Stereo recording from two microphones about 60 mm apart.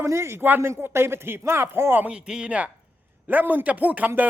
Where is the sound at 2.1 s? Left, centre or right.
Centre.